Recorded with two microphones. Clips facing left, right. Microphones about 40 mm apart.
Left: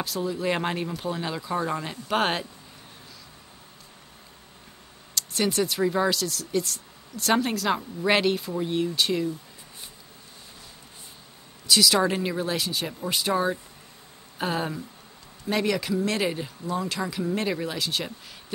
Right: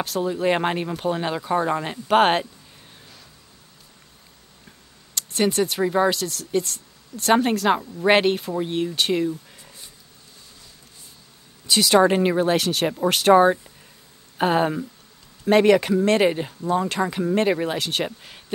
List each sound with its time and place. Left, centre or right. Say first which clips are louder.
0.2 s speech: right 5 dB; right
5.1 s speech: right 4 dB; right
5.8 s speech: right 4 dB; right
6.0 s speech: right 3 dB; right
8.9 s speech: right 3 dB; right
11.6 s speech: right 5 dB; right
12.6 s speech: right 9 dB; right
13.3 s speech: right 12 dB; right
17.7 s speech: right 4 dB; right
18.0 s speech: right 7 dB; right